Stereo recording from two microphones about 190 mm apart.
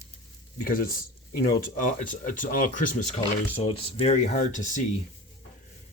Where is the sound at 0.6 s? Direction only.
45° left (ahead or behind).